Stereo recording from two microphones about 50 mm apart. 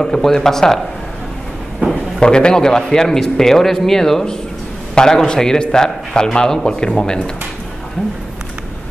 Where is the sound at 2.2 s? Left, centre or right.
Centre.